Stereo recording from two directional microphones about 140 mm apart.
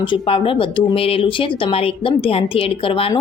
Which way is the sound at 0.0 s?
40° left (ahead or behind).